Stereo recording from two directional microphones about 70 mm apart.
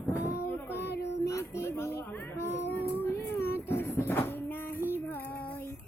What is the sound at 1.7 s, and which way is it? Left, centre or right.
Child singing, left.